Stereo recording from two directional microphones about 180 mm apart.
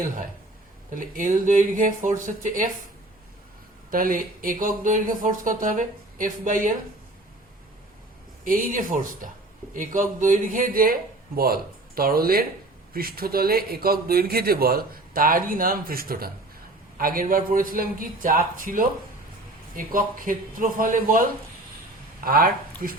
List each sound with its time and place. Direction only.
0.9 s speech: 45° right (ahead or behind)
3.9 s speech: 50° right (ahead or behind)
8.4 s speech: 50° right (ahead or behind)